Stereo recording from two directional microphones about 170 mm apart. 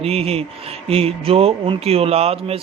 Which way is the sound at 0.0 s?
35° right (ahead or behind).